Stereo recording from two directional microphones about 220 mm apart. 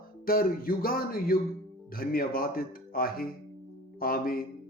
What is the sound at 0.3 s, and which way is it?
Music, 40° left (ahead or behind).